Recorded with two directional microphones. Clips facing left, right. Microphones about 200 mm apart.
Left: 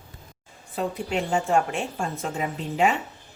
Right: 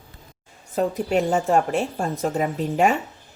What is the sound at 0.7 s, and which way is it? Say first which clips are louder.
A woman's voice: right 6 dB; 45° right (ahead or behind).